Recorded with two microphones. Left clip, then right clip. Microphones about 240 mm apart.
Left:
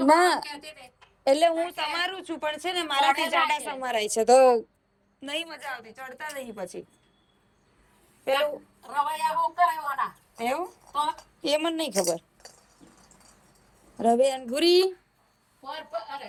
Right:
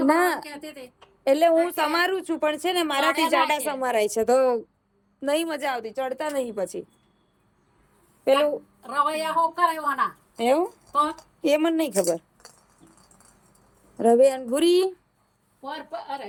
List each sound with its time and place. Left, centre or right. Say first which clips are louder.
0.1 s a woman's voice: left 4 dB; centre
0.4 s a woman's voice: even; right
1.2 s a woman's voice: right 2 dB; centre
1.6 s a woman's voice: right 6 dB; right; by 4.6 s centre
5.2 s a woman's voice: right 8 dB; centre
5.5 s a woman's voice: right 9 dB; right
8.2 s a woman's voice: right 5 dB; right
8.8 s a woman's voice: right 2 dB; right
10.3 s a woman's voice: right 8 dB; right
14.0 s a woman's voice: right 4 dB; centre